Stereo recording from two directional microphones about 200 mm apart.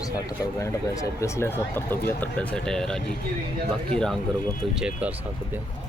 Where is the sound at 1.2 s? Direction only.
10° left (ahead or behind).